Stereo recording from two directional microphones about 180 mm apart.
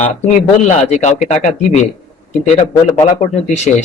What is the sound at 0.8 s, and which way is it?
Speech, 40° left (ahead or behind).